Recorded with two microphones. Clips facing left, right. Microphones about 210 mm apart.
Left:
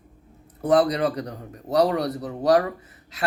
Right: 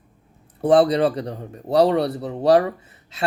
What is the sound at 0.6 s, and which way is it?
Speech, 30° right (ahead or behind).